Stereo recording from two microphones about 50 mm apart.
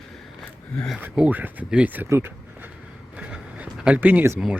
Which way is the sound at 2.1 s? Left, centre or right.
Right.